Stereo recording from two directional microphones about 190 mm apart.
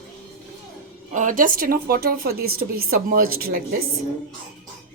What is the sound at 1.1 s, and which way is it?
A woman's voice, 40° right (ahead or behind).